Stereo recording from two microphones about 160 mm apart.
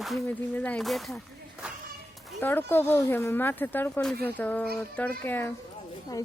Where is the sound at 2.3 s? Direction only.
15° left (ahead or behind).